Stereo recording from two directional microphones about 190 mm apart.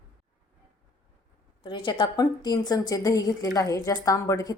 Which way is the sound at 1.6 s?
25° left (ahead or behind).